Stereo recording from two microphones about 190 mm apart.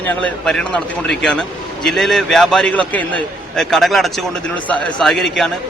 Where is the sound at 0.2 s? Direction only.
5° left (ahead or behind).